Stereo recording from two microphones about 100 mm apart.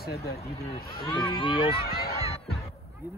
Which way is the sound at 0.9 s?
50° left (ahead or behind).